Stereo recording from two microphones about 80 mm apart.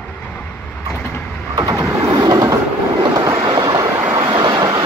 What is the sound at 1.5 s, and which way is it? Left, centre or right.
Vehicle, right.